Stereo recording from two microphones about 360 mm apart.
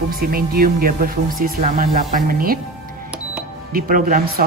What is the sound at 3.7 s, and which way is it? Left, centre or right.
Speech, right.